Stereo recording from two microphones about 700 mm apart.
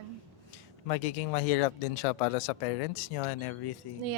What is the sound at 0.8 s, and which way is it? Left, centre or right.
Speech, left.